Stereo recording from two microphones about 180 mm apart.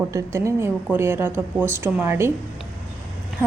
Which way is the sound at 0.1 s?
15° right (ahead or behind).